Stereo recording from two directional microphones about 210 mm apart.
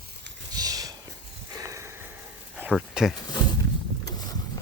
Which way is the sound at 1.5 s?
15° right (ahead or behind).